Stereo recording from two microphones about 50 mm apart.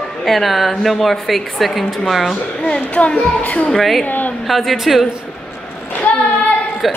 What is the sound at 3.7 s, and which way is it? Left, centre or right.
Speech, centre.